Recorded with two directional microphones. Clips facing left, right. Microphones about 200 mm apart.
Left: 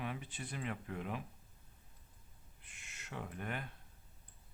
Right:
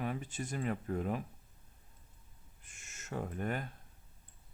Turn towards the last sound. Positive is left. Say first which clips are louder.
# right 6 dB
turn(degrees=-40)  # may be behind; listen again after turning